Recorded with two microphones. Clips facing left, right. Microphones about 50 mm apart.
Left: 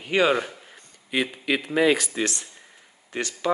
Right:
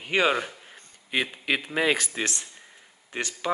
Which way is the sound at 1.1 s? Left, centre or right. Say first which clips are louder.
Left 2 dB; right.